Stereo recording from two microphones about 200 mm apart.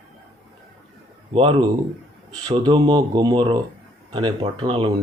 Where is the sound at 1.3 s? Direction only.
30° right (ahead or behind).